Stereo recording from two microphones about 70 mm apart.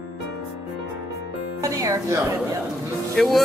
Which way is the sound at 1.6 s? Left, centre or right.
Right.